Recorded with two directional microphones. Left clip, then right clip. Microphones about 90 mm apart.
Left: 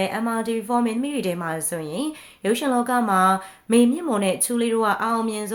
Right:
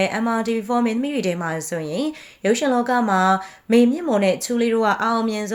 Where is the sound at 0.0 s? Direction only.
30° right (ahead or behind).